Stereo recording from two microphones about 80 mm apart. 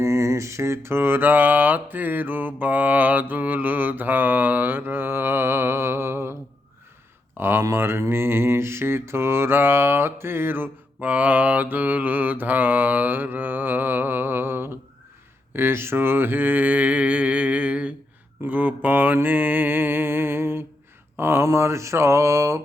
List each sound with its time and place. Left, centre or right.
0.0 s mantra: right
7.3 s speech: right
7.6 s mantra: right